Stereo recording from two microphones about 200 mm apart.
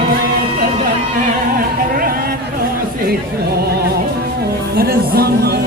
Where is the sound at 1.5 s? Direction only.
45° right (ahead or behind).